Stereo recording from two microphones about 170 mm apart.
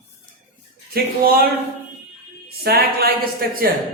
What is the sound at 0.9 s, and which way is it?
Speech, 60° right (ahead or behind).